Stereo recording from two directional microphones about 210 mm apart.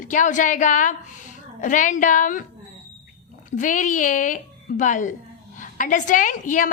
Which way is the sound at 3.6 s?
40° left (ahead or behind).